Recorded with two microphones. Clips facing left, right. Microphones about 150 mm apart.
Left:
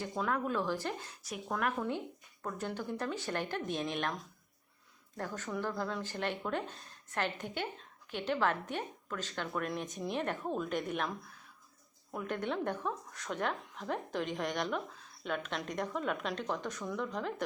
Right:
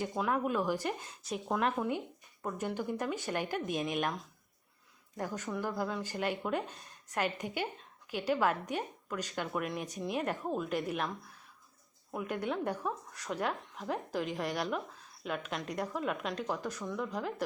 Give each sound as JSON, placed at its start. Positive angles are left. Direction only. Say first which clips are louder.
{"t": 0.0, "sound": "a woman's voice", "louder": "right 2 dB", "side_deg": -10}
{"t": 12.1, "sound": "a woman's voice", "louder": "right 1 dB", "side_deg": -5}